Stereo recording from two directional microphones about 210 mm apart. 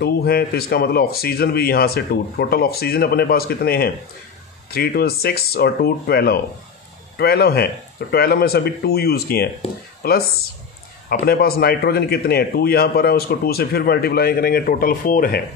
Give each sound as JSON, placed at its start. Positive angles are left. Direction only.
{"t": 0.0, "sound": "a man's voice", "side_deg": 50}